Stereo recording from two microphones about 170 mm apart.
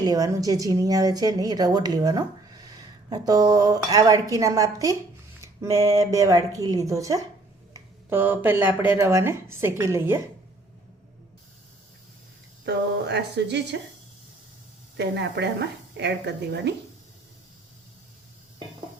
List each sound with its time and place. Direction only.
0.0 s speech: 20° right (ahead or behind)
12.6 s speech: 80° right
14.9 s speech: 85° right